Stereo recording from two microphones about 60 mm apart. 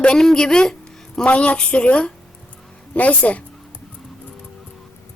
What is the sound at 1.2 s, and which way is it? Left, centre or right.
Speech, left.